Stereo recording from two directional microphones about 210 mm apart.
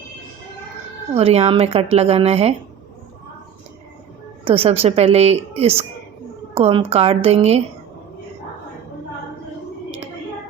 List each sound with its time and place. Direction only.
1.1 s speech: 30° right (ahead or behind)
4.4 s speech: 25° right (ahead or behind)